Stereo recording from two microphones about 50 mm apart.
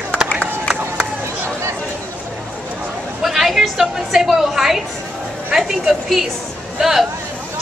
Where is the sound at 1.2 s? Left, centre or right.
Right.